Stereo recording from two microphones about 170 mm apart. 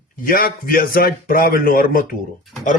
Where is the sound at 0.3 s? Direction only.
60° left (ahead or behind).